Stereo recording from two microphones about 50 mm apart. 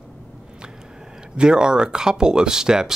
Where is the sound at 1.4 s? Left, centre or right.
Centre.